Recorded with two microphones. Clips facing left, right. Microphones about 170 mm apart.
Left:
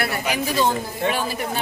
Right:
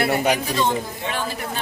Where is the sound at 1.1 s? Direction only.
10° left (ahead or behind).